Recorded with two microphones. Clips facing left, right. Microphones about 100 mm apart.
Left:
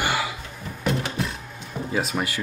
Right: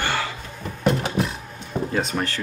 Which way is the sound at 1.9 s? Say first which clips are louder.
Left 1 dB; 5° left (ahead or behind).